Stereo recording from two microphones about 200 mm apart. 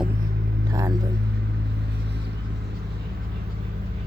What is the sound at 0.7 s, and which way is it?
Speech, 15° right (ahead or behind).